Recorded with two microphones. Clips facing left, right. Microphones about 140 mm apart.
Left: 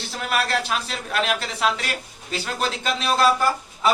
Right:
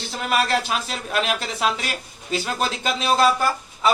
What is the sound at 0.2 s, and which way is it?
Speech, 5° right (ahead or behind).